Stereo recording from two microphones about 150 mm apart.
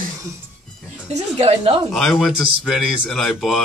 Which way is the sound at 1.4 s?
40° right (ahead or behind).